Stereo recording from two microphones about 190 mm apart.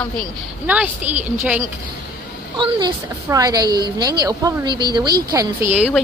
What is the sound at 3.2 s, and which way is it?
A woman's voice, 20° right (ahead or behind).